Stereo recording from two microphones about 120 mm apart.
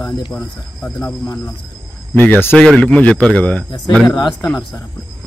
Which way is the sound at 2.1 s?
15° left (ahead or behind).